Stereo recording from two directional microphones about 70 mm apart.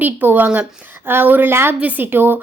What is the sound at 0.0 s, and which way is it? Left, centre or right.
A child's voice, right.